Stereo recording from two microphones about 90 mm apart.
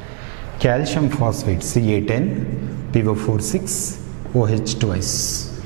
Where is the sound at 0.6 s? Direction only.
15° right (ahead or behind).